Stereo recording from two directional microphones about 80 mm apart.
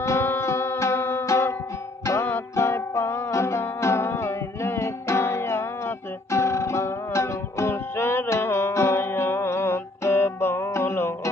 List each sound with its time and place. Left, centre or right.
0.0 s music: left
2.6 s music: left